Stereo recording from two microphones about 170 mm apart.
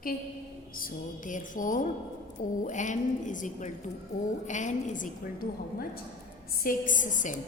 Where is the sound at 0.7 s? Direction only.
55° left (ahead or behind).